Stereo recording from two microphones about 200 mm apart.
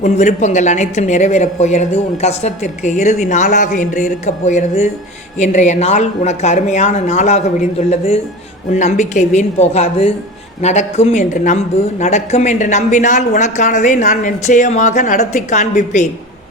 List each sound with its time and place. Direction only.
0.0 s speech: 35° left (ahead or behind)